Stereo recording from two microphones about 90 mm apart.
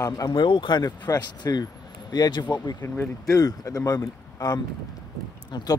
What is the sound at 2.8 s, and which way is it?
Speech, 25° left (ahead or behind).